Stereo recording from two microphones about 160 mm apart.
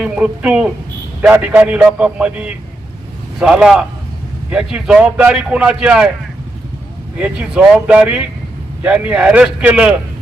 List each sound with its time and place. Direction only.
0.0 s a man's voice: 5° right (ahead or behind)
7.2 s a man's voice: 5° right (ahead or behind)